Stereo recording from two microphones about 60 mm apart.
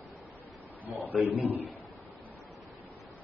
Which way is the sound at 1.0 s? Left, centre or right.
Right.